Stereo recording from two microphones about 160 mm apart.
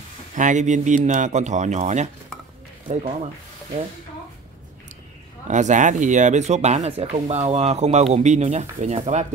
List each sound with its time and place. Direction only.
0.3 s speech: 50° right (ahead or behind)
5.5 s speech: 50° right (ahead or behind)